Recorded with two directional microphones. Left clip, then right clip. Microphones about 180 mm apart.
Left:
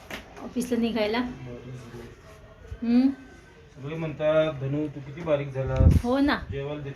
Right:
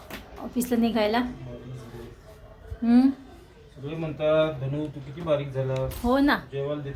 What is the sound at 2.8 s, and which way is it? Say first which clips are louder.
Speech: right 2 dB; 20° right (ahead or behind).